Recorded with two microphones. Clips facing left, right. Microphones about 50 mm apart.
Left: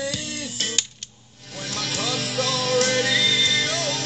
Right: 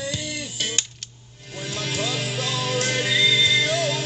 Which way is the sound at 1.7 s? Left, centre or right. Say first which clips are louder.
Even; left.